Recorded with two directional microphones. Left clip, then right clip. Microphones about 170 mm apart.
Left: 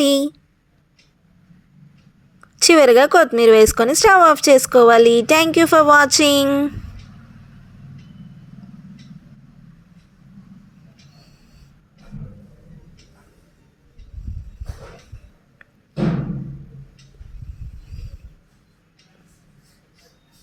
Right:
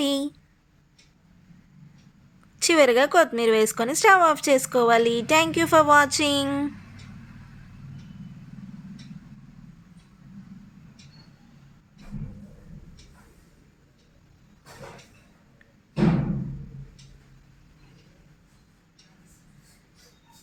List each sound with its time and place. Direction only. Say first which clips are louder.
0.0 s speech: left 9 dB; 30° left (ahead or behind)
2.6 s speech: left 8 dB; 30° left (ahead or behind)
6.5 s speech: left 9 dB; 25° left (ahead or behind)